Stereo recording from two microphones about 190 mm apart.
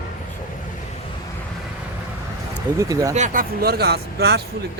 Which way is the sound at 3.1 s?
40° right (ahead or behind).